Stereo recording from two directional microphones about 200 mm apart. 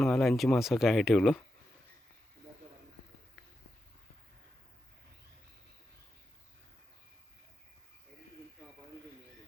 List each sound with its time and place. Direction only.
0.0 s speech: centre (ahead or behind)